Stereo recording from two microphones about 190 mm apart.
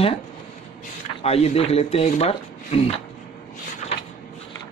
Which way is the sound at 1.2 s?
35° left (ahead or behind).